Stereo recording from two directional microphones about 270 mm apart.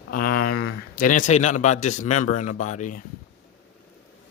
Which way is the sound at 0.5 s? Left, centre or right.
Left.